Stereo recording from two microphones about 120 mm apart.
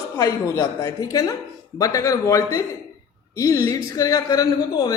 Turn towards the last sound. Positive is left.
turn(degrees=30)  # may be behind; listen again after turning